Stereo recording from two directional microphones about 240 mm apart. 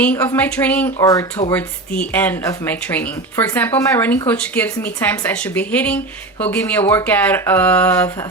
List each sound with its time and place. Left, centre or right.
0.0 s speech: centre